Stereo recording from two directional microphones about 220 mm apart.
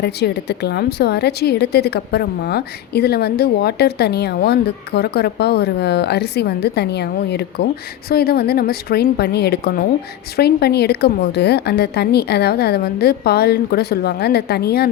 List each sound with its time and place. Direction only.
0.0 s a woman's voice: 50° left (ahead or behind)